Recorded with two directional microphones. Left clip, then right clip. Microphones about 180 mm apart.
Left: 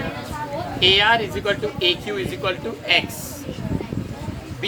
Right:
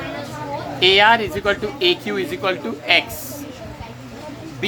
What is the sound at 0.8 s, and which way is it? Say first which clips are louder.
Speech: right 3 dB; 60° right (ahead or behind).